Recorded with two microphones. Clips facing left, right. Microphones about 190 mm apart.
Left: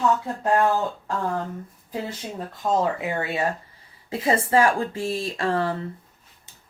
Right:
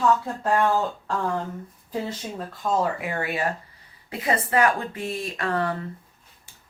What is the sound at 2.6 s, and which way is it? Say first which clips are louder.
A woman's voice: left 2 dB; 20° left (ahead or behind).